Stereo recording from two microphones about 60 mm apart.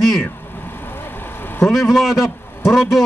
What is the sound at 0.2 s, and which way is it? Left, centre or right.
Vehicle, left.